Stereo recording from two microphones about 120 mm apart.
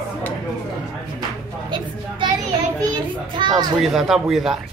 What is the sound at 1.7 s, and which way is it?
Speech, 40° right (ahead or behind).